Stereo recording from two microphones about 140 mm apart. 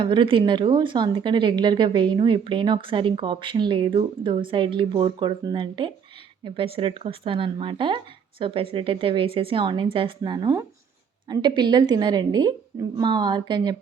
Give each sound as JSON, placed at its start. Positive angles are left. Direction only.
{"t": 0.0, "sound": "speech", "side_deg": -35}